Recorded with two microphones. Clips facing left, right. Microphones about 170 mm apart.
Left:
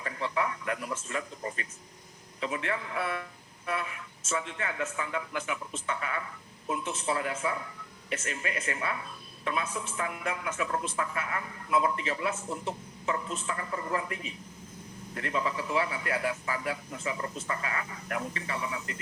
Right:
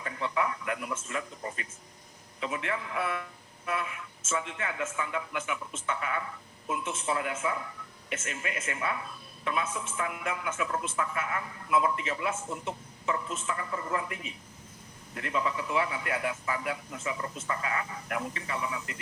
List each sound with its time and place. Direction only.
0.0 s a man's voice: 30° left (ahead or behind)